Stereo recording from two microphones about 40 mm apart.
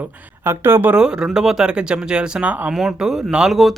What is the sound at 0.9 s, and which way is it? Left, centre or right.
Speech, centre.